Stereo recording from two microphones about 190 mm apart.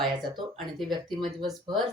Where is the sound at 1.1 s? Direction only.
25° right (ahead or behind).